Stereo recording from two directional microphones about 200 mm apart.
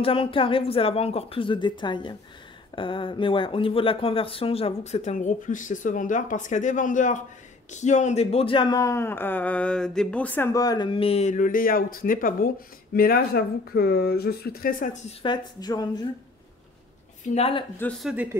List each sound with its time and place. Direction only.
0.0 s speech: 25° left (ahead or behind); by 14.9 s 45° left (ahead or behind)
15.0 s speech: 20° left (ahead or behind)
17.3 s speech: 30° left (ahead or behind)
17.7 s a man's voice: 5° left (ahead or behind)